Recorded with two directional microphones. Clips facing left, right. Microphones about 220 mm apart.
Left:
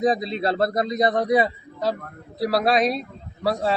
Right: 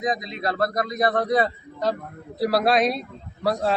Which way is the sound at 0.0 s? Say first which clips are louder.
Left 5 dB; 30° left (ahead or behind).